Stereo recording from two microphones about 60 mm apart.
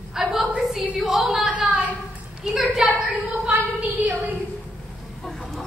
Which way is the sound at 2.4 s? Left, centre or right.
Centre.